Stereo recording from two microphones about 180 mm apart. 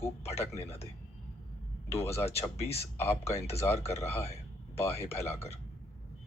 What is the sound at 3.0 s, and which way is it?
Speech, 15° left (ahead or behind).